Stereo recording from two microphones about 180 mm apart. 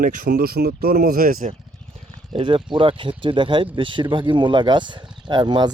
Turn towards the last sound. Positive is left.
turn(degrees=-25)  # may be behind; listen again after turning